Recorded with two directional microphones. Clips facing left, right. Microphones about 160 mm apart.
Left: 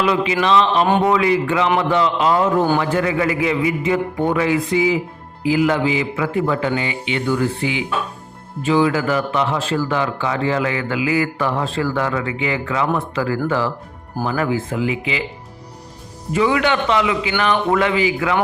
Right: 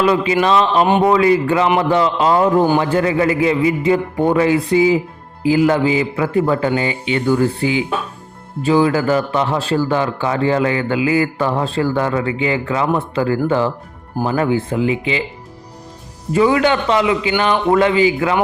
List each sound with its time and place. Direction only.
0.0 s a man's voice: 40° right (ahead or behind)
16.3 s a man's voice: 35° right (ahead or behind)